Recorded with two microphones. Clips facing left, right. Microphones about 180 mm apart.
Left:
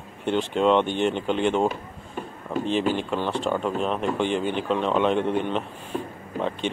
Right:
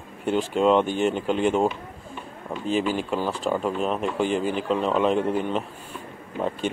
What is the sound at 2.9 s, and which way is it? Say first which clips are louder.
Speech: even; 5° right (ahead or behind).